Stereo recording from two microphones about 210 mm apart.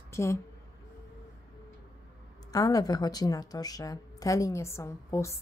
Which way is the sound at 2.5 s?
15° left (ahead or behind).